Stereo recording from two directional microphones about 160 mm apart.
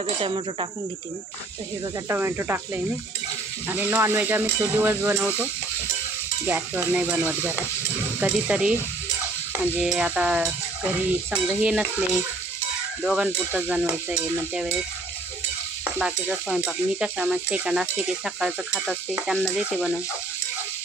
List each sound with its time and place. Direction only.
0.0 s cricket: 35° right (ahead or behind)
2.0 s speech: 15° right (ahead or behind)
9.5 s stir: 5° right (ahead or behind)
13.0 s speech: 5° right (ahead or behind)
15.8 s stir: 5° right (ahead or behind)